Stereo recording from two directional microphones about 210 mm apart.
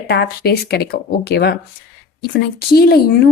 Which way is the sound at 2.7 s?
50° left (ahead or behind).